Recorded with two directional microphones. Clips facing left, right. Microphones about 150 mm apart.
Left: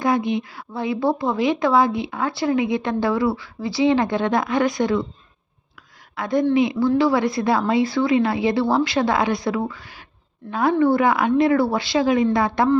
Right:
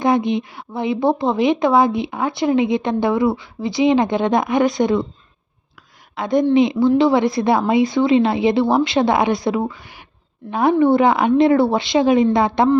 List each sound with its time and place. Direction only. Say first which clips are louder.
0.0 s a woman's voice: right 3 dB; 20° right (ahead or behind)
6.1 s a woman's voice: right 3 dB; 20° right (ahead or behind)